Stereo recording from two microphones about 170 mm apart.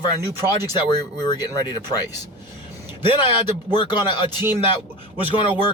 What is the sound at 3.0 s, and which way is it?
Speech, 30° left (ahead or behind).